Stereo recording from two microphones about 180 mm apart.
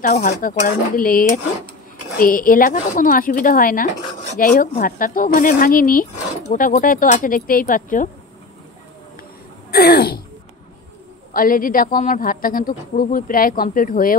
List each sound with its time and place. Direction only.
0.0 s a woman's voice: 45° left (ahead or behind)
9.7 s throat clearing: 60° left (ahead or behind)
11.3 s a woman's voice: 50° left (ahead or behind)